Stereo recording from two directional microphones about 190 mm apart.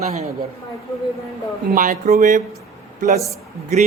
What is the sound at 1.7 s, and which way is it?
Speech, 40° right (ahead or behind).